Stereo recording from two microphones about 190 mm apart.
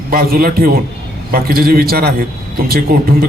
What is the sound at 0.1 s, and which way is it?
A man's voice, 50° right (ahead or behind).